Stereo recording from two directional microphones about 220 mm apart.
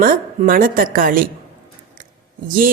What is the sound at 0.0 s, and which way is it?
Speech, 40° right (ahead or behind).